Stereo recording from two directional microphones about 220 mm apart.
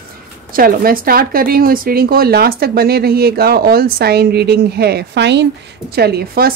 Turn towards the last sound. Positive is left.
turn(degrees=-45)  # may be behind; listen again after turning